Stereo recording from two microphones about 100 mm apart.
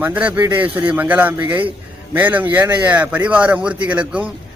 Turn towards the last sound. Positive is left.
turn(degrees=-15)  # may be behind; listen again after turning